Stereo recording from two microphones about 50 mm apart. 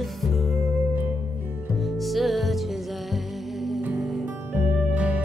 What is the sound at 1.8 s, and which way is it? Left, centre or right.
Music, centre.